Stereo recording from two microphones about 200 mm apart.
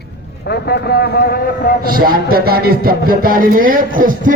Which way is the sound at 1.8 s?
45° right (ahead or behind).